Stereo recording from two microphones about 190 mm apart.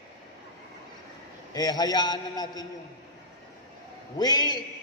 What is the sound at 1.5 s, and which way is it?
A man's voice, 20° left (ahead or behind).